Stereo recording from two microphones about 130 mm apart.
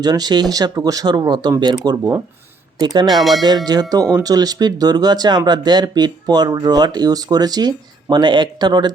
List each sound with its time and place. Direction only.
0.0 s speech: 30° right (ahead or behind)
3.2 s speech: centre (ahead or behind)
3.7 s speech: 30° right (ahead or behind)